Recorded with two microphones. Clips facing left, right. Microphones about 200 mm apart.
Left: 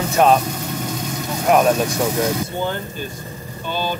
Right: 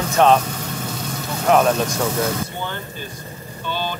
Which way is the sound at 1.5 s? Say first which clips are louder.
Left 1 dB; 10° left (ahead or behind).